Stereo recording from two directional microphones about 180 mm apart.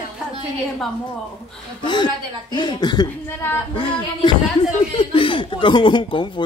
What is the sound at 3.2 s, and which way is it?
Speech, 15° left (ahead or behind).